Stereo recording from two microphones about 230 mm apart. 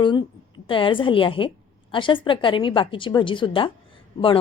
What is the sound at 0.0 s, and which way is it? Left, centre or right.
A woman's voice, centre.